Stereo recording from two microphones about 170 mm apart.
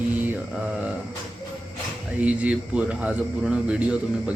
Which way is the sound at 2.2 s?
5° right (ahead or behind).